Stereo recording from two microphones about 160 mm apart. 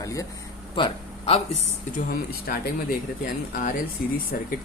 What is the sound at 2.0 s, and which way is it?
Speech, 65° left (ahead or behind).